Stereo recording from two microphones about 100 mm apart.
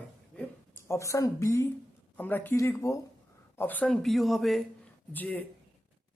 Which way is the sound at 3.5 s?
20° left (ahead or behind).